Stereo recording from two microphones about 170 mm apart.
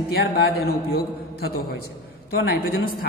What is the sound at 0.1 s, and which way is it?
Speech, 70° left (ahead or behind).